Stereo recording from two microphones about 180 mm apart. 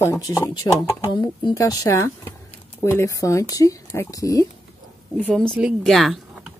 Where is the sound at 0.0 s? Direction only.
15° left (ahead or behind).